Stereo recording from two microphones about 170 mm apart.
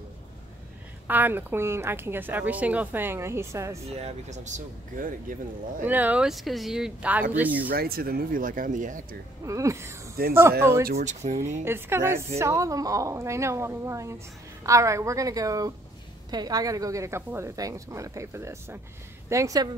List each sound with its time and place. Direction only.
1.0 s a woman's voice: 10° right (ahead or behind)
3.9 s speech: 40° right (ahead or behind)
5.8 s a woman's voice: 10° right (ahead or behind)
7.6 s speech: 65° right (ahead or behind)
9.4 s a woman's voice: 20° right (ahead or behind)
10.2 s speech: 60° right (ahead or behind)
10.6 s a woman's voice: 15° right (ahead or behind)
11.0 s speech: 45° right (ahead or behind)
11.6 s a woman's voice: 15° right (ahead or behind)